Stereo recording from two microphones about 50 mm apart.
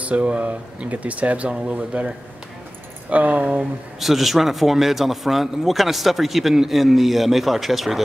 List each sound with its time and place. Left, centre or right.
0.0 s speech: right
3.1 s speech: right
4.0 s speech: centre